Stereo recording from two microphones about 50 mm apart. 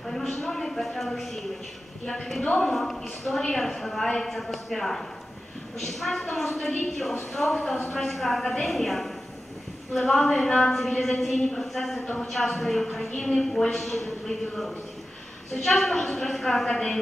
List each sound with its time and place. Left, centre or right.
0.0 s a woman's voice: centre
12.0 s a woman's voice: centre
12.3 s a woman's voice: centre